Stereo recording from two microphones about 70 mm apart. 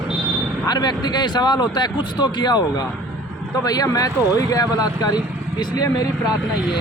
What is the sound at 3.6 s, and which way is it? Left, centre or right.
Speech, left.